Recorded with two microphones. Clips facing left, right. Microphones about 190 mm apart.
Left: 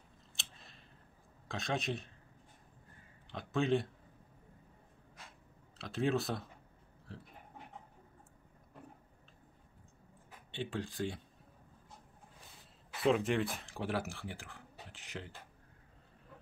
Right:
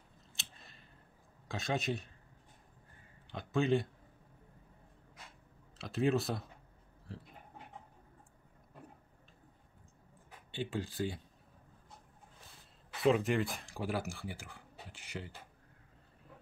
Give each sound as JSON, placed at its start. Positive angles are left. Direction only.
{"t": 0.4, "sound": "scissors", "side_deg": 0}
{"t": 1.5, "sound": "speech", "side_deg": 0}
{"t": 3.3, "sound": "speech", "side_deg": 0}
{"t": 5.8, "sound": "speech", "side_deg": 0}
{"t": 7.1, "sound": "a sound", "side_deg": 0}
{"t": 10.5, "sound": "speech", "side_deg": 0}
{"t": 12.9, "sound": "speech", "side_deg": 0}